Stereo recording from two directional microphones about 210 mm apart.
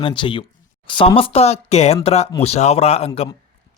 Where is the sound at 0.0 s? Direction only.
25° left (ahead or behind).